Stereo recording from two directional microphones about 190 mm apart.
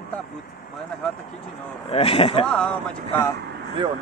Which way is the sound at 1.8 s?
30° left (ahead or behind).